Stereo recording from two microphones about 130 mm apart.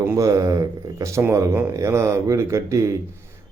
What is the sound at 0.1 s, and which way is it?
Speech, 25° right (ahead or behind).